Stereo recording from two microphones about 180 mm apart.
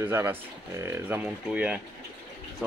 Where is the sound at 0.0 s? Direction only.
10° right (ahead or behind).